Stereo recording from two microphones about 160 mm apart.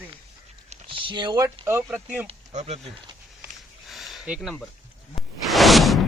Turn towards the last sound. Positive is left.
turn(degrees=0)  # may be behind; listen again after turning